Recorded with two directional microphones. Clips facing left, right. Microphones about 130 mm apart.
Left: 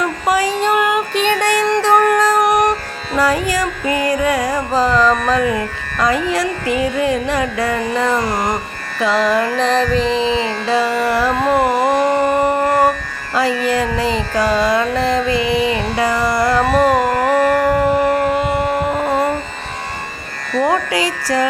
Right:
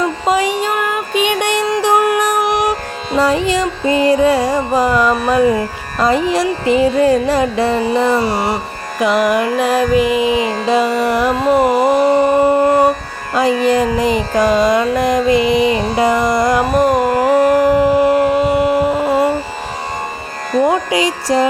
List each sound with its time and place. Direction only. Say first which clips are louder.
0.0 s child singing: right 2 dB; 25° right (ahead or behind)
0.6 s child singing: left 3 dB; centre (ahead or behind)
1.2 s music: right 1 dB; 15° right (ahead or behind)
3.1 s music: right 2 dB; 25° right (ahead or behind)
4.7 s music: left 1 dB; 15° right (ahead or behind)
5.4 s music: right 5 dB; 25° right (ahead or behind)
7.8 s music: right 3 dB; 15° right (ahead or behind)
11.7 s carnatic music: right 3 dB; 5° right (ahead or behind)
11.9 s a sound: right 3 dB; 35° right (ahead or behind)
12.6 s music: right 3 dB; 20° right (ahead or behind)
15.7 s carnatic music: right 3 dB; 35° right (ahead or behind)
16.0 s carnatic music: right 2 dB; 20° right (ahead or behind)
18.5 s a sound: right 4 dB; 10° right (ahead or behind)
20.7 s music: right 2 dB; 20° right (ahead or behind)